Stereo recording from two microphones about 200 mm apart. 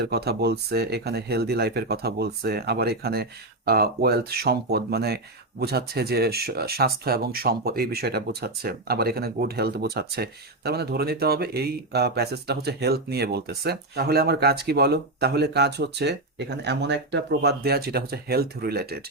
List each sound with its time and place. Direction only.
0.0 s speech: 55° right (ahead or behind)